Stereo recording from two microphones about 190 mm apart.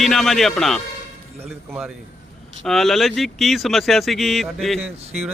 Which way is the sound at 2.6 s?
Centre (ahead or behind).